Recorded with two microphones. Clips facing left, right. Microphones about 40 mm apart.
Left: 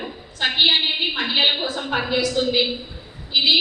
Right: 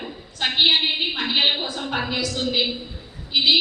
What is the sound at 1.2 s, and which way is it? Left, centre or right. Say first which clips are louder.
A woman's voice: left 2 dB; left.